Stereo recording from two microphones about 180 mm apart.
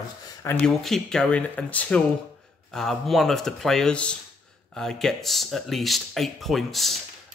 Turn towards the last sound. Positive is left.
turn(degrees=0)  # may be behind; listen again after turning